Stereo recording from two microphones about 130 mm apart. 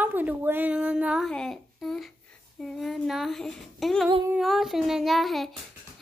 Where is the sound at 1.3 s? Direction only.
5° left (ahead or behind).